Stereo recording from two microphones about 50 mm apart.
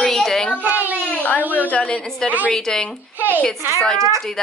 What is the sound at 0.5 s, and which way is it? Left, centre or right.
Speech, right.